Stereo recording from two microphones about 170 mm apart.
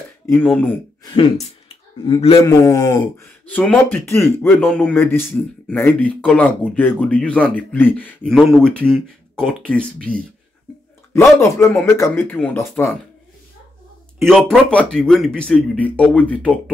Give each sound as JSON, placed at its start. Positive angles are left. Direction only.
{"t": 0.3, "sound": "speech", "side_deg": 10}
{"t": 2.0, "sound": "a man's voice", "side_deg": 30}
{"t": 2.4, "sound": "speech", "side_deg": 15}
{"t": 14.2, "sound": "speech", "side_deg": 5}